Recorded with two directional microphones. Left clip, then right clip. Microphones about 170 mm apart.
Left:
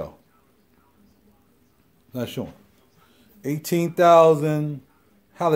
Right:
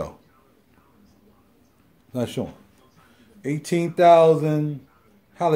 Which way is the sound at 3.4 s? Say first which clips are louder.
Even; 40° left (ahead or behind).